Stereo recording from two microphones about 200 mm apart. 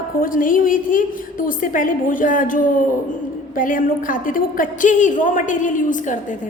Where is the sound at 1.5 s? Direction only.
40° left (ahead or behind).